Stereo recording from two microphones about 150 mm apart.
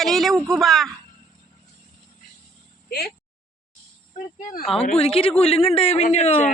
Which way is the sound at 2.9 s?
90° left.